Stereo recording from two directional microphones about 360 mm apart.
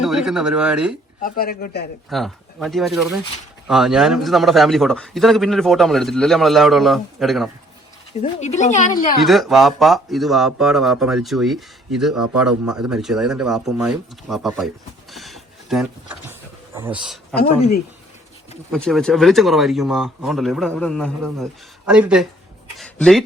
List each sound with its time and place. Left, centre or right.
0.0 s speech: centre
1.2 s speech: left
2.0 s speech: centre
8.2 s speech: centre
9.2 s speech: centre
15.1 s a sound: centre
16.7 s speech: centre
18.7 s speech: centre